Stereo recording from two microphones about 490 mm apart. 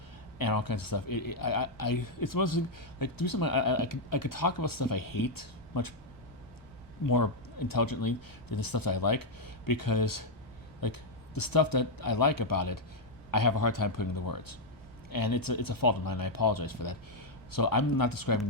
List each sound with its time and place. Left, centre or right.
0.3 s speech: left
7.0 s speech: left